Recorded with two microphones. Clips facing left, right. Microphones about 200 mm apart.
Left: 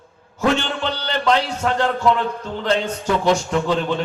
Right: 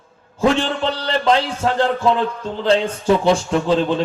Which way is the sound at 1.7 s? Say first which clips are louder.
Right 1 dB; 30° right (ahead or behind).